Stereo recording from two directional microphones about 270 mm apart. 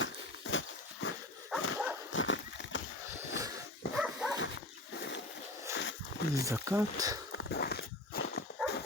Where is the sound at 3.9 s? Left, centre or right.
Centre.